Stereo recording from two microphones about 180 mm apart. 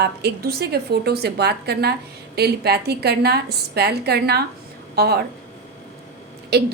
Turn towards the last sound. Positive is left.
turn(degrees=-65)  # may be behind; listen again after turning